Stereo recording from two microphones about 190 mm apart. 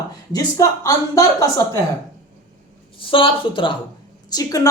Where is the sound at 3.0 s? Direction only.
25° left (ahead or behind).